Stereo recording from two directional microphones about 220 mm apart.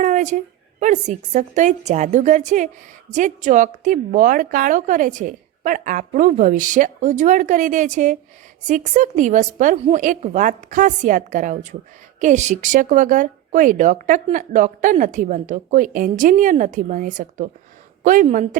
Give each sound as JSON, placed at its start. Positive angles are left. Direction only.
{"t": 0.0, "sound": "speech", "side_deg": -35}